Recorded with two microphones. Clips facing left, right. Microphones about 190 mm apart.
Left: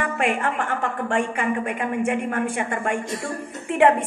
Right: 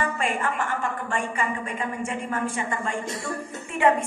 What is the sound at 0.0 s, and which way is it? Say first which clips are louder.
A woman's voice: left 3 dB; 60° left (ahead or behind).